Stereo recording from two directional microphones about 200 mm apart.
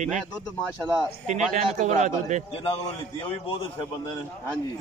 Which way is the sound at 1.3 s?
35° right (ahead or behind).